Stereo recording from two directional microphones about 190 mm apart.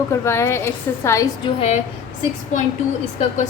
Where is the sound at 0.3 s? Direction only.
15° left (ahead or behind).